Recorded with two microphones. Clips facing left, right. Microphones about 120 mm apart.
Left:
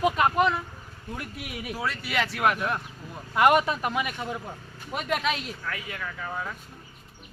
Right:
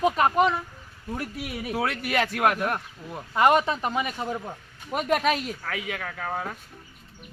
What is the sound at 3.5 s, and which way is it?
Speech, 25° right (ahead or behind).